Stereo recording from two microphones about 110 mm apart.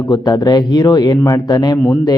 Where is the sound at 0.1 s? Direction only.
35° left (ahead or behind).